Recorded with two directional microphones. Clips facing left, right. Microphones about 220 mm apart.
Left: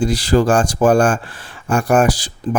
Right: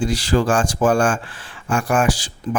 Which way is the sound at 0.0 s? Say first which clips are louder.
Left 4 dB; 40° left (ahead or behind).